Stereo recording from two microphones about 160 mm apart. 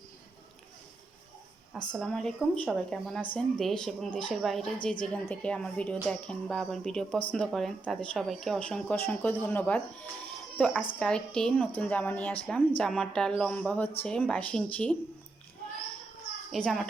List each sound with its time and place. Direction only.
1.9 s a woman's voice: 5° left (ahead or behind)
16.5 s a child's voice: 5° left (ahead or behind)